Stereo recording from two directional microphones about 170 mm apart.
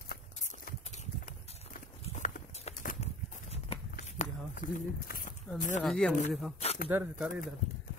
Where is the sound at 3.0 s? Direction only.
35° left (ahead or behind).